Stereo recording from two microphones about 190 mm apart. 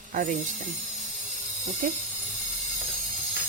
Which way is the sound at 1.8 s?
45° right (ahead or behind).